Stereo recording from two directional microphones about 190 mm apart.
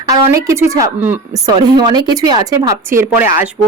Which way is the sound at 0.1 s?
15° right (ahead or behind).